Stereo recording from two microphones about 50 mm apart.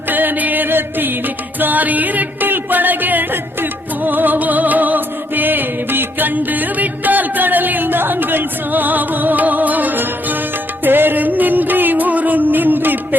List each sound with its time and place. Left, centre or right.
0.1 s music: right